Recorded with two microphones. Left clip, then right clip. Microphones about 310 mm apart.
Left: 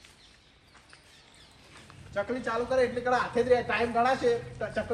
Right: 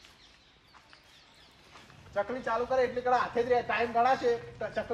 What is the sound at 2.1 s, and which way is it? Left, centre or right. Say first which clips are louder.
A man's voice: even; right.